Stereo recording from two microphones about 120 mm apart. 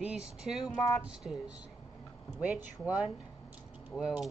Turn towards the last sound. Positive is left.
turn(degrees=-5)  # may be behind; listen again after turning